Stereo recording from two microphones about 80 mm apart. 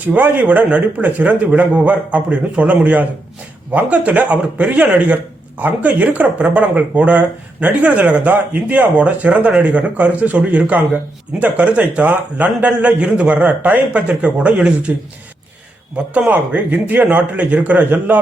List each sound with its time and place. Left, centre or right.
0.1 s speech: right
16.1 s a man's voice: centre